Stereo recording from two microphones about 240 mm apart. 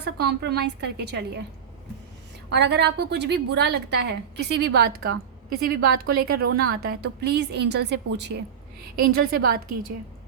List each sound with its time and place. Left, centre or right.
0.0 s a woman's voice: right
2.5 s a woman's voice: right
9.3 s a woman's voice: right